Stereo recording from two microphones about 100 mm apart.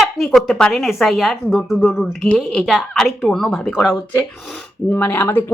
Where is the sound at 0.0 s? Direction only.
Centre (ahead or behind).